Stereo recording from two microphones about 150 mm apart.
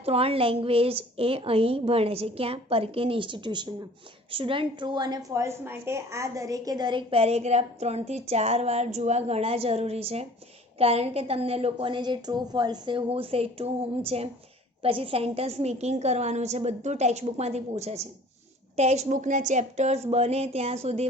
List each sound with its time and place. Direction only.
0.0 s a woman's voice: 40° right (ahead or behind)